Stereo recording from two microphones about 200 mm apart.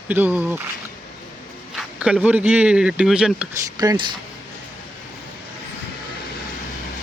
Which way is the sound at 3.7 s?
20° right (ahead or behind).